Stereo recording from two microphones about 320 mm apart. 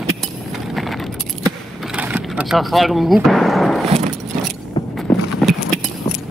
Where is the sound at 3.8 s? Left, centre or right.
Centre.